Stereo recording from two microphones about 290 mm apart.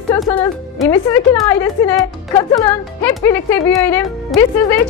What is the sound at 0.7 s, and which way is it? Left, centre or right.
Speech, centre.